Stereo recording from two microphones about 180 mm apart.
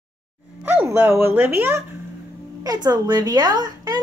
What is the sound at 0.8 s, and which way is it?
A woman's voice, 10° right (ahead or behind).